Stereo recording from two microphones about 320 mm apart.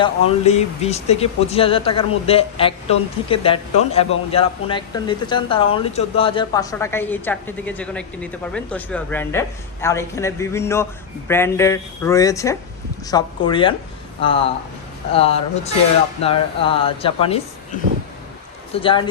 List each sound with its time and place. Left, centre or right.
0.0 s a woman's voice: centre
18.7 s a woman's voice: centre